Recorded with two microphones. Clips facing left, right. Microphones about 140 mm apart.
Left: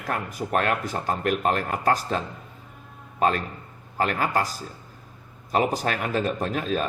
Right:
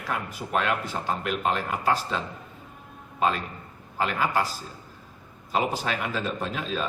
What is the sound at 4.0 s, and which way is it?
Speech, 45° left (ahead or behind).